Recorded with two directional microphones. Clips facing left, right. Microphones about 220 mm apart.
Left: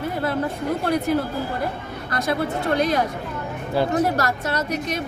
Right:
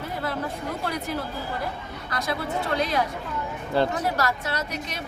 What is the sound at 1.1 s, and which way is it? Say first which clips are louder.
A woman's voice: left 8 dB; 55° left (ahead or behind).